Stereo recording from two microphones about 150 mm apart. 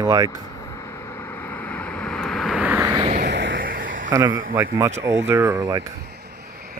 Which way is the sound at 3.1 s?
70° right (ahead or behind).